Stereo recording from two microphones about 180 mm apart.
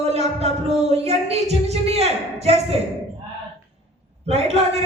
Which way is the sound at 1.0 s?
35° right (ahead or behind).